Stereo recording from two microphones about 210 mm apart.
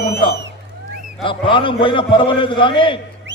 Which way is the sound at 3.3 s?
60° right (ahead or behind).